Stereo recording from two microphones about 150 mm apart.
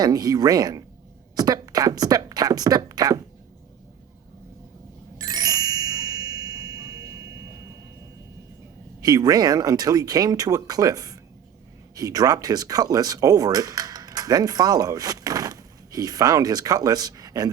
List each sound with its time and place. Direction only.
0.0 s speech: 25° right (ahead or behind)
5.1 s ding: 25° right (ahead or behind)
9.0 s speech: 25° right (ahead or behind)